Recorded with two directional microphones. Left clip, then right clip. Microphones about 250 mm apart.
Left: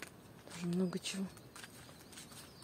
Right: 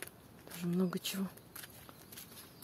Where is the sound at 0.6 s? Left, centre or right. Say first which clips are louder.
Right 2 dB; centre.